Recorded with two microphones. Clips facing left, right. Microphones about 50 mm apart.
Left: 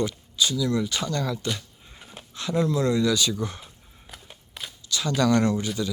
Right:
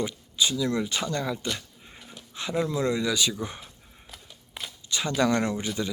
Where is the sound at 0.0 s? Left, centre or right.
Centre.